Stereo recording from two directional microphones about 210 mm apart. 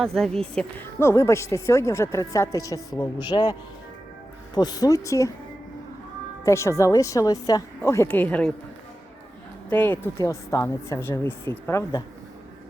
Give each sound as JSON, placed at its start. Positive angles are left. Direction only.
{"t": 0.0, "sound": "speech", "side_deg": 0}
{"t": 4.5, "sound": "speech", "side_deg": 20}
{"t": 6.4, "sound": "speech", "side_deg": 15}
{"t": 9.6, "sound": "speech", "side_deg": 10}